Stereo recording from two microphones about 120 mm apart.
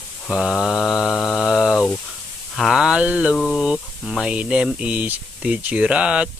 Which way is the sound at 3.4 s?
5° right (ahead or behind).